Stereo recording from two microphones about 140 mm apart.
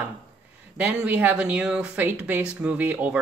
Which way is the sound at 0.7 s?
10° right (ahead or behind).